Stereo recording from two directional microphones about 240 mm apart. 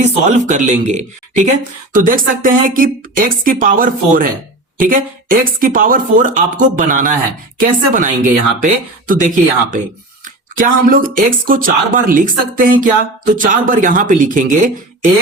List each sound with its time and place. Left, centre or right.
0.0 s speech: right